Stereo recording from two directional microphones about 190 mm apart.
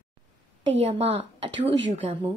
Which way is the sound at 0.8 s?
35° right (ahead or behind).